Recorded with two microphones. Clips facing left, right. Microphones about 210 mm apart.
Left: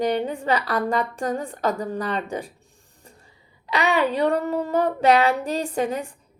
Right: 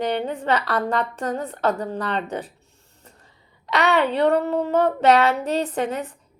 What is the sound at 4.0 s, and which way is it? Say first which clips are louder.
Speech: right 1 dB; 10° left (ahead or behind).